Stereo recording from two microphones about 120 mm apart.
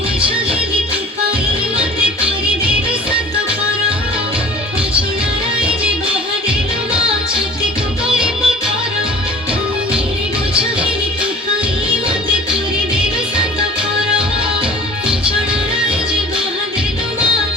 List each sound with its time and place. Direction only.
1.8 s music: 10° right (ahead or behind)
8.0 s music: 5° right (ahead or behind)
12.0 s music: 45° right (ahead or behind)